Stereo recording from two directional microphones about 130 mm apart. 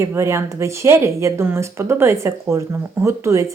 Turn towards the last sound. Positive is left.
turn(degrees=-20)  # may be behind; listen again after turning